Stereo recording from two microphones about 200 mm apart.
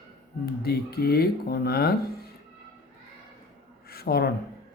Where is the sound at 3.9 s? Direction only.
50° left (ahead or behind).